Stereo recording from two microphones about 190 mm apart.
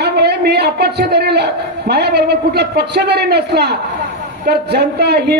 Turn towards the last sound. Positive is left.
turn(degrees=-60)  # may be behind; listen again after turning